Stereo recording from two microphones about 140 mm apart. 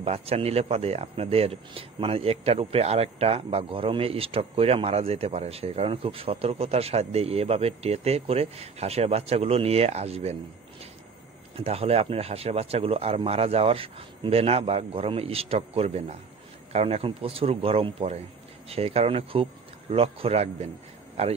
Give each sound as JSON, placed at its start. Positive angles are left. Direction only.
{"t": 0.0, "sound": "speech", "side_deg": -45}
{"t": 11.5, "sound": "speech", "side_deg": -45}